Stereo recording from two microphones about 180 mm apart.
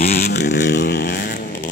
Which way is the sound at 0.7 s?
65° left (ahead or behind).